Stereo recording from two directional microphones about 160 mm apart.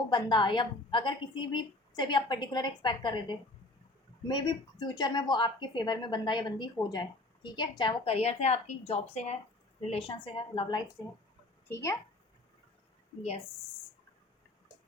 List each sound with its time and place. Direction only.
0.1 s a woman's voice: 30° left (ahead or behind)